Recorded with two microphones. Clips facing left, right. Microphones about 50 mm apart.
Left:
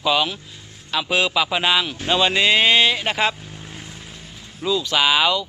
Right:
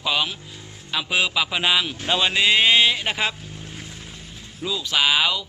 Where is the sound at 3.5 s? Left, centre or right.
Centre.